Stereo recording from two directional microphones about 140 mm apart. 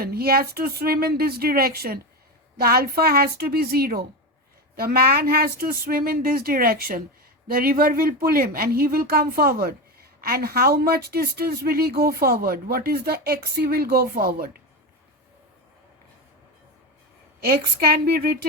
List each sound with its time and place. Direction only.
0.0 s speech: 90° right
17.4 s speech: 90° right